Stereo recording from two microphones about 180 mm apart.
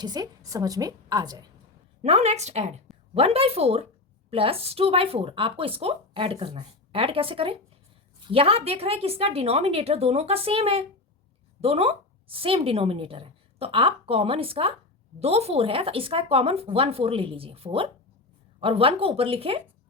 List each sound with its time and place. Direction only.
0.0 s a woman's voice: 20° right (ahead or behind)
2.0 s a woman's voice: 35° right (ahead or behind)